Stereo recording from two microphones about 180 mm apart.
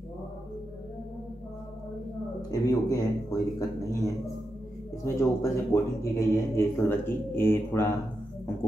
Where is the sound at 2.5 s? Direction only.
20° left (ahead or behind).